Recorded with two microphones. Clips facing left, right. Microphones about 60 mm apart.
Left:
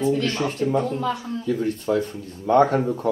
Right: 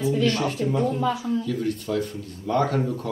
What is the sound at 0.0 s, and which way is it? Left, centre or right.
A woman's voice, centre.